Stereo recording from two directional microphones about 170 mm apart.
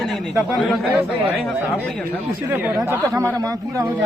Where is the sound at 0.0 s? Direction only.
Centre (ahead or behind).